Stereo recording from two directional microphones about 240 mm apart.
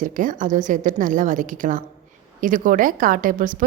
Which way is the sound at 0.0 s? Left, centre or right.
Right.